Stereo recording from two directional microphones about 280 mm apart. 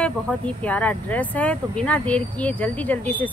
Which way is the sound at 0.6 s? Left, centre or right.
Centre.